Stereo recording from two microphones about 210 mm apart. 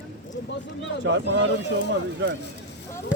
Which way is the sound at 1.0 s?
60° right (ahead or behind).